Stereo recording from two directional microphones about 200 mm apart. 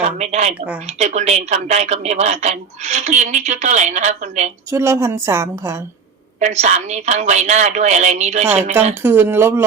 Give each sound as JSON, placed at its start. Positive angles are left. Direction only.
{"t": 0.0, "sound": "speech", "side_deg": -35}
{"t": 4.7, "sound": "a woman's voice", "side_deg": -15}
{"t": 6.4, "sound": "speech", "side_deg": -35}
{"t": 9.0, "sound": "a woman's voice", "side_deg": -10}